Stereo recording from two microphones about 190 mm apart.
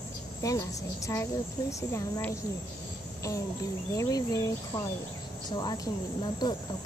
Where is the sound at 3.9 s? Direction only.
20° left (ahead or behind).